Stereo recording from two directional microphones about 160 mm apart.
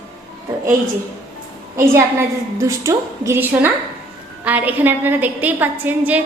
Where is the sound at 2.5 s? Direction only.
20° right (ahead or behind).